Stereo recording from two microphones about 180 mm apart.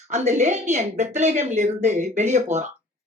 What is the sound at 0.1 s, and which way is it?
Speech, 40° right (ahead or behind).